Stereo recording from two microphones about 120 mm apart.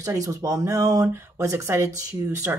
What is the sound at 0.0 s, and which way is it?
Speech, 30° right (ahead or behind).